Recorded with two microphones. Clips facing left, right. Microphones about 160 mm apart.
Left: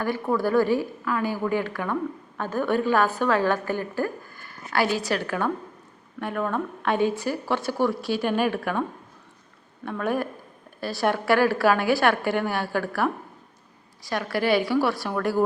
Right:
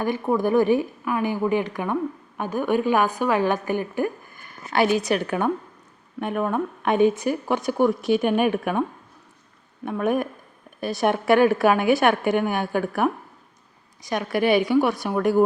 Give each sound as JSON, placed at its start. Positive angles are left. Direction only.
{"t": 0.0, "sound": "a woman's voice", "side_deg": -20}
{"t": 9.8, "sound": "speech", "side_deg": -15}